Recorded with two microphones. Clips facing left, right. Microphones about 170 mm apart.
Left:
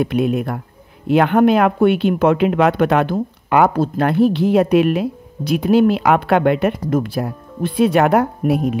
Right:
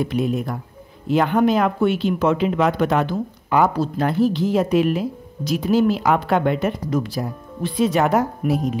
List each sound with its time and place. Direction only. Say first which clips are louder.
0.0 s speech: left 4 dB; 65° left (ahead or behind)